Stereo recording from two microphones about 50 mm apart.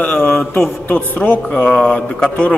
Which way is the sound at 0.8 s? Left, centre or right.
Left.